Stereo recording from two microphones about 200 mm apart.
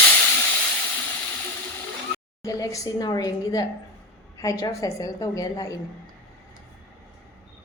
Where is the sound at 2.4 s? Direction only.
15° left (ahead or behind).